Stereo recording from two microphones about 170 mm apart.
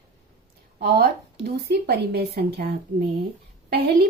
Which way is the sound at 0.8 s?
70° right (ahead or behind).